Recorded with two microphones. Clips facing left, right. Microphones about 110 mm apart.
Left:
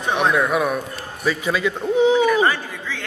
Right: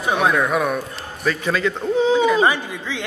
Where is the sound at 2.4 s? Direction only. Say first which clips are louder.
Right 2 dB; 15° right (ahead or behind).